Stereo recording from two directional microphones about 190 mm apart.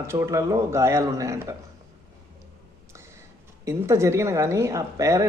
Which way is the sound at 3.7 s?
15° right (ahead or behind).